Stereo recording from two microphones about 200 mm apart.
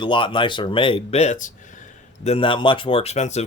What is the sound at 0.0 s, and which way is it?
Speech, 25° left (ahead or behind).